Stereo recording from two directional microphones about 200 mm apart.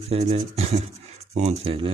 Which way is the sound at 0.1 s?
30° right (ahead or behind).